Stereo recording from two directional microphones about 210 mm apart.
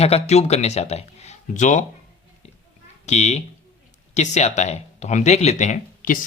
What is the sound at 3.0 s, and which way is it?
Speech, 30° left (ahead or behind).